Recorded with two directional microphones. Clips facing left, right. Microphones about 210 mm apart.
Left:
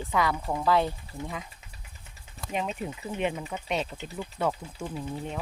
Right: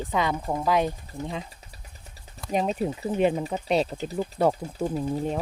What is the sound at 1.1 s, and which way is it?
Speech, centre (ahead or behind).